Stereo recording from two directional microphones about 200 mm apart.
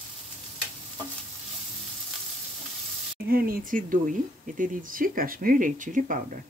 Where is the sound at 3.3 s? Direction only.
45° right (ahead or behind).